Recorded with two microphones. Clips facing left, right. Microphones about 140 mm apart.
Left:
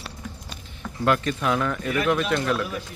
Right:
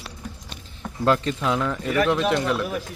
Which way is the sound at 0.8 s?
25° right (ahead or behind).